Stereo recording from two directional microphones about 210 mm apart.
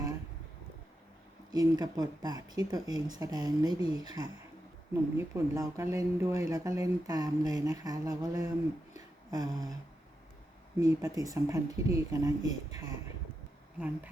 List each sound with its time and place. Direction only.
1.5 s speech: 20° right (ahead or behind)
10.8 s speech: 15° right (ahead or behind)
13.7 s speech: 5° right (ahead or behind)